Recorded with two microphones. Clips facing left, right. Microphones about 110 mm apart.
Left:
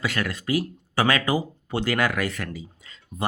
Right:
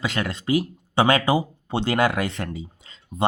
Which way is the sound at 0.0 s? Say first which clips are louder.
Right 1 dB; 25° right (ahead or behind).